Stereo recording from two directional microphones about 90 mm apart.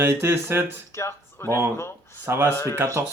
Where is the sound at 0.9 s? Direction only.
30° left (ahead or behind).